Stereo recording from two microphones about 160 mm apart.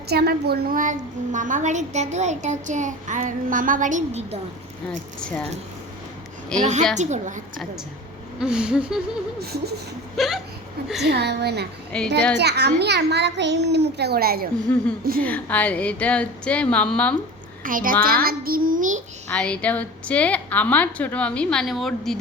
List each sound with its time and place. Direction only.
0.1 s a woman's voice: 85° right; by 4.4 s 45° right (ahead or behind)
4.9 s speech: 5° left (ahead or behind)
6.6 s a woman's voice: 45° right (ahead or behind)
8.4 s speech: 5° right (ahead or behind)
9.4 s a sound: 85° right
10.2 s speech: centre (ahead or behind)
11.0 s a child's voice: 90° right
11.9 s speech: 5° left (ahead or behind)
12.4 s a child's voice: 90° right; by 14.4 s 70° right (ahead or behind)
14.7 s a woman's voice: 10° left (ahead or behind)
17.6 s a child's voice: 60° right (ahead or behind)
19.3 s a woman's voice: 5° left (ahead or behind)